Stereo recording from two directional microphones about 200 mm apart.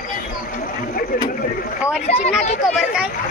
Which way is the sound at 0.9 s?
45° left (ahead or behind).